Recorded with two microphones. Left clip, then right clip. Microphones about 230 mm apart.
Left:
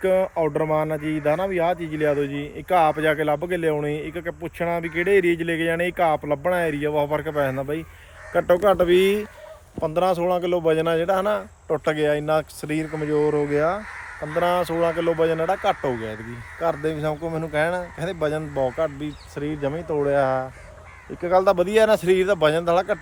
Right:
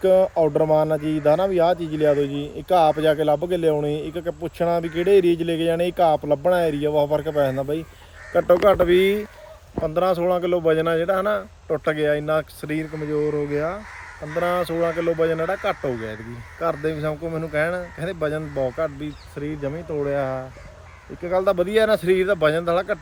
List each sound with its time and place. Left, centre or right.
0.0 s speech: centre
14.9 s speech: centre
15.9 s speech: centre
16.6 s speech: centre